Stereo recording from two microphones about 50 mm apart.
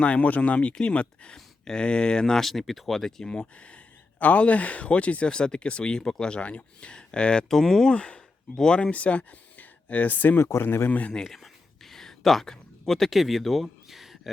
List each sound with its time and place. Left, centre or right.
0.0 s speech: left; by 3.2 s centre
3.2 s speech: left
7.4 s speech: centre
7.9 s speech: centre
8.9 s speech: left
10.2 s speech: left
10.4 s speech: left
10.8 s speech: left
11.9 s a sound: centre